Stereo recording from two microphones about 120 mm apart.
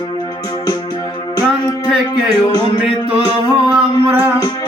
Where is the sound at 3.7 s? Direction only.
15° right (ahead or behind).